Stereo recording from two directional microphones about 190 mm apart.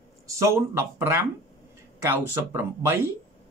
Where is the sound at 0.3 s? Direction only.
15° right (ahead or behind).